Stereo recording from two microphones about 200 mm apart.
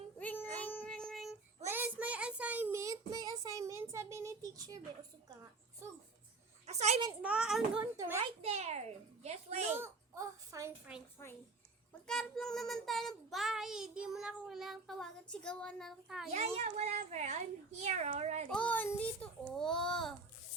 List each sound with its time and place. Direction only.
0.2 s child singing: 10° left (ahead or behind)
0.6 s music: 10° left (ahead or behind)
1.7 s child singing: 10° right (ahead or behind)
6.7 s a sound: 35° right (ahead or behind)
7.2 s child singing: 5° right (ahead or behind)
7.9 s a child's voice: 15° right (ahead or behind)
8.2 s a child's voice: 30° right (ahead or behind)
9.7 s child singing: 15° right (ahead or behind)
12.0 s child singing: 5° left (ahead or behind)
16.3 s a child's voice: 35° right (ahead or behind)
18.5 s child singing: 5° left (ahead or behind)